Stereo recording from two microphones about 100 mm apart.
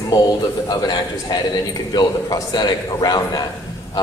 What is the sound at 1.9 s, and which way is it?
A man's voice, 45° left (ahead or behind).